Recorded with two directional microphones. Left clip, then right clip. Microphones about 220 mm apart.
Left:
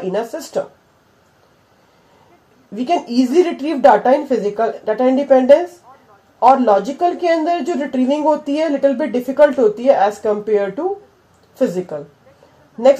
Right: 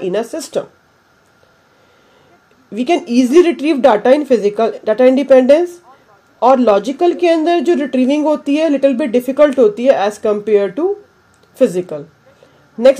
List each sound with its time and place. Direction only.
0.1 s speech: 50° right (ahead or behind)
2.7 s speech: 45° right (ahead or behind)